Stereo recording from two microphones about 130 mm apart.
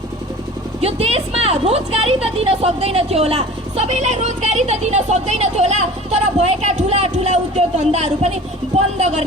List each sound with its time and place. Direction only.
0.8 s a woman's voice: 50° right (ahead or behind)